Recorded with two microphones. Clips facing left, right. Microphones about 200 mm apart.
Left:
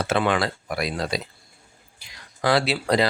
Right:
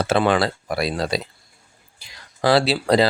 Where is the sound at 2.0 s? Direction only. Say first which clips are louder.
Right 4 dB; 30° right (ahead or behind).